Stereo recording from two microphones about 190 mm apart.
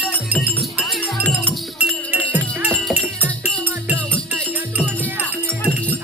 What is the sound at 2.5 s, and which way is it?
Music, 10° right (ahead or behind).